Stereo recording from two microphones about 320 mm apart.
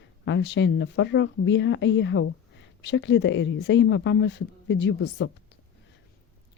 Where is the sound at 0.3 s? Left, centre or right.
Left.